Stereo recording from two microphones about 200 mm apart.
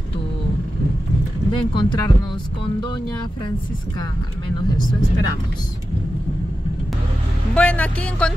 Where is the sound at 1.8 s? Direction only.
25° left (ahead or behind).